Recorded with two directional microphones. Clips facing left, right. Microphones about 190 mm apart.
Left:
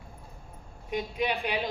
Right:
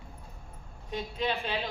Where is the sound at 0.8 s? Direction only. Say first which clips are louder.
Left 2 dB; 15° left (ahead or behind).